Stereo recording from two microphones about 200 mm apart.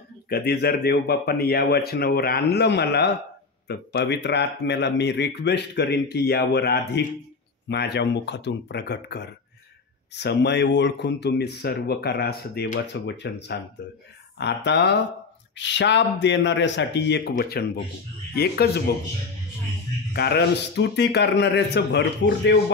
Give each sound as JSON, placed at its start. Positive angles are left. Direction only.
{"t": 0.3, "sound": "a man's voice", "side_deg": 55}
{"t": 20.1, "sound": "speech", "side_deg": 50}